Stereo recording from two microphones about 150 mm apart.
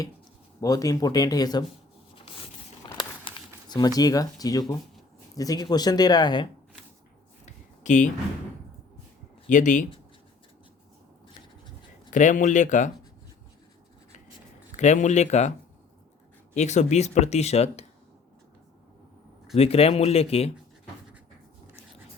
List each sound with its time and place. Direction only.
0.6 s speech: 25° left (ahead or behind)
2.8 s a sound: 30° left (ahead or behind)
3.2 s speech: 30° left (ahead or behind)
7.4 s a sound: 55° left (ahead or behind)
9.5 s speech: 55° left (ahead or behind)
12.1 s speech: 55° left (ahead or behind)
14.8 s speech: 50° left (ahead or behind)
16.6 s speech: 50° left (ahead or behind)
19.5 s speech: 40° left (ahead or behind)